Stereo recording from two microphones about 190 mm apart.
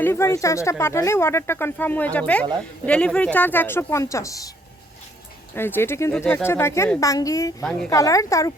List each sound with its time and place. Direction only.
0.0 s speech: 10° left (ahead or behind)
5.5 s speech: 10° left (ahead or behind)